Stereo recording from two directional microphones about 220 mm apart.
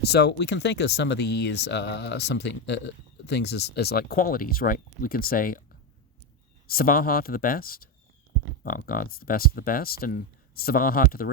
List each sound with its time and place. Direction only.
0.0 s speech: 50° left (ahead or behind)
6.7 s speech: 40° left (ahead or behind)